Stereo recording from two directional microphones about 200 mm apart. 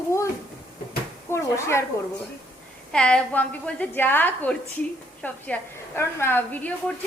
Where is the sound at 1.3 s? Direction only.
15° left (ahead or behind).